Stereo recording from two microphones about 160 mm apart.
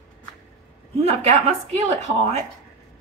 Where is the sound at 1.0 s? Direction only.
40° right (ahead or behind).